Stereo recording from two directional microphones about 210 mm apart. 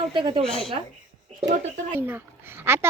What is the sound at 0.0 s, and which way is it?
Speech, 25° right (ahead or behind).